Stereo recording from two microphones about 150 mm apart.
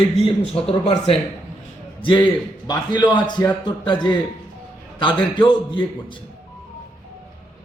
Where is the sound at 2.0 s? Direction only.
30° left (ahead or behind).